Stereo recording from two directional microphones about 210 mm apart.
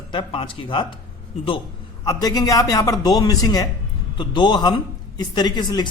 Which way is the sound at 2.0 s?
15° left (ahead or behind).